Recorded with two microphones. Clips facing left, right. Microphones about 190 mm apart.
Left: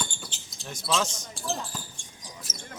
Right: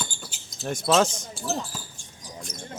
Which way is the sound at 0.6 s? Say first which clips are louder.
Right 8 dB; 50° right (ahead or behind).